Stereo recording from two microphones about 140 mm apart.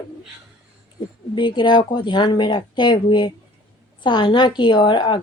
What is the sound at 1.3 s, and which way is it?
A woman's voice, 35° left (ahead or behind).